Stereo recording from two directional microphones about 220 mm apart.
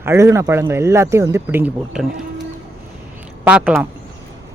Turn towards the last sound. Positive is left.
turn(degrees=-5)  # may be behind; listen again after turning